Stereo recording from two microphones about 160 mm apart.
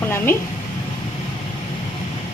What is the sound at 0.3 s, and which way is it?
Speech, 15° left (ahead or behind).